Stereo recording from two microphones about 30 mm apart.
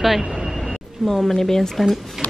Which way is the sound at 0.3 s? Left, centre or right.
Right.